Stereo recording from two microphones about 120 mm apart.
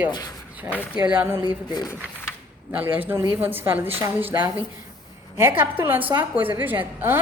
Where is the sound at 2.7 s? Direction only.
15° right (ahead or behind).